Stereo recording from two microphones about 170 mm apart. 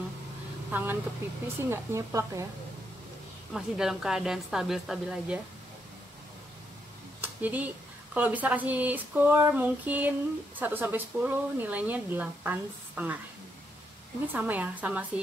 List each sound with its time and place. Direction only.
0.7 s a woman's voice: 10° right (ahead or behind)
3.5 s a woman's voice: 5° right (ahead or behind)
7.2 s a woman's voice: 10° right (ahead or behind)
14.2 s a woman's voice: 10° right (ahead or behind)